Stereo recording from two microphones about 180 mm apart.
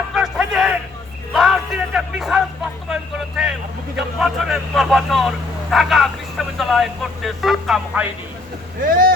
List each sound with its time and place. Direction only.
0.1 s a sound: 5° right (ahead or behind)
1.3 s music: centre (ahead or behind)
2.9 s speech: 5° right (ahead or behind)
8.8 s speech: 50° right (ahead or behind)